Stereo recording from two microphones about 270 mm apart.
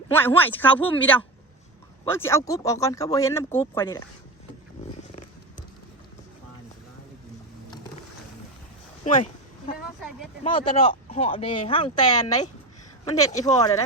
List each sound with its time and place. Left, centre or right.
0.1 s speech: centre
9.0 s a sound: left
10.4 s speech: centre